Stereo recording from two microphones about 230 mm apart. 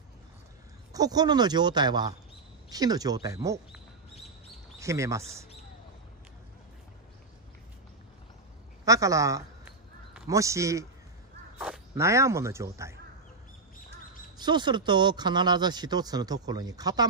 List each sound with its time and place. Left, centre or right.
0.9 s speech: centre
3.7 s bird: centre
4.7 s speech: centre
8.8 s speech: centre
14.4 s speech: centre